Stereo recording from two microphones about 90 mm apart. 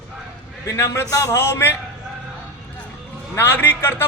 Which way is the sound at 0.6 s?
30° left (ahead or behind).